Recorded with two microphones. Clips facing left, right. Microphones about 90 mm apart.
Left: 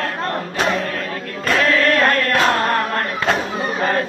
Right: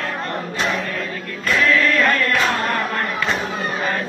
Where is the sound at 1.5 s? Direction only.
60° left (ahead or behind).